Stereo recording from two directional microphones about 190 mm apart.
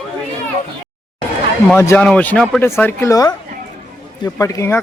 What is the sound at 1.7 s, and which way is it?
Speech, 10° left (ahead or behind).